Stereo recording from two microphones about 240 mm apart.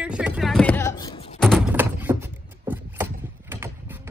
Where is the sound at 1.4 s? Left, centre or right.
Centre.